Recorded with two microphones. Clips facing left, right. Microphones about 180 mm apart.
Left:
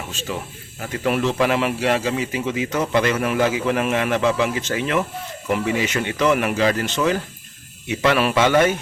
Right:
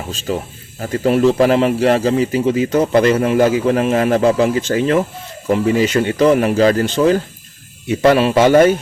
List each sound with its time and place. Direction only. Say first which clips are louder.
0.1 s a man's voice: right 7 dB; 35° right (ahead or behind)